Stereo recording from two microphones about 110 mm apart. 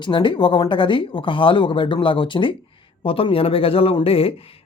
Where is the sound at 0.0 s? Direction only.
50° left (ahead or behind).